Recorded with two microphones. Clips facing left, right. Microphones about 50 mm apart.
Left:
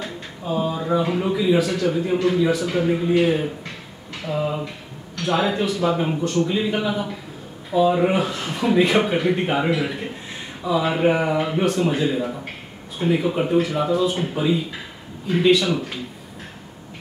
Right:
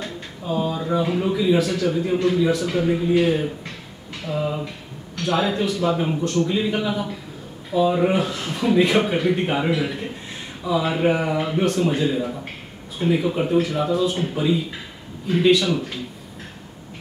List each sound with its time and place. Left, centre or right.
0.0 s a sound: centre
0.9 s speech: centre
5.1 s speech: centre